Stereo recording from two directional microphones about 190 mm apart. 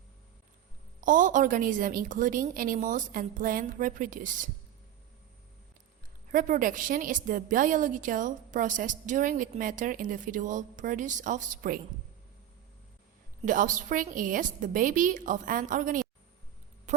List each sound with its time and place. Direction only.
1.0 s a woman's voice: 45° right (ahead or behind)
6.3 s a woman's voice: 45° right (ahead or behind)
13.4 s a woman's voice: 45° right (ahead or behind)